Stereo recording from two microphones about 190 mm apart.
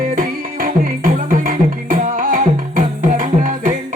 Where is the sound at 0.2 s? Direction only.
45° right (ahead or behind).